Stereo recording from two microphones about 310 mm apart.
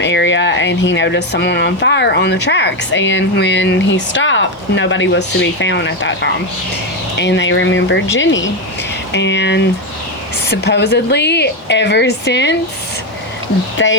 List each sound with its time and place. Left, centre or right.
0.0 s speech: left
7.2 s speech: left
13.8 s speech: left